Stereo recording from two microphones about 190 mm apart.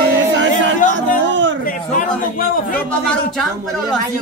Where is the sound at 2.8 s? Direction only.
Centre (ahead or behind).